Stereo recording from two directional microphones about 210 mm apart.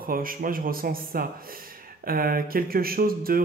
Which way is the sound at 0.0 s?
45° right (ahead or behind).